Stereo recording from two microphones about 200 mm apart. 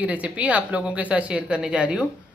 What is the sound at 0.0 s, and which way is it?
A woman's voice, 5° right (ahead or behind).